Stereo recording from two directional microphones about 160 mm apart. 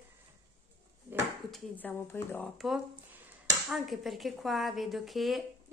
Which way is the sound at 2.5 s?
Centre (ahead or behind).